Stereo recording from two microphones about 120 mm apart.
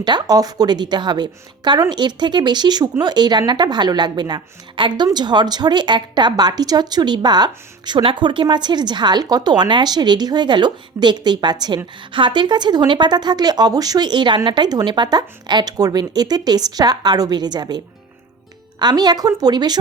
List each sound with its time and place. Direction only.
0.0 s a woman's voice: 35° right (ahead or behind)
18.8 s a woman's voice: 35° right (ahead or behind)